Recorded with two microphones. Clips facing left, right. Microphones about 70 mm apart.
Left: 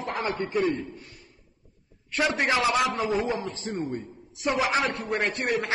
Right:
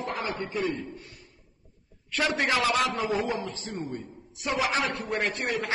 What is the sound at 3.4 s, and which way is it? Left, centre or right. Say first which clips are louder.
Speech: left 2 dB; left.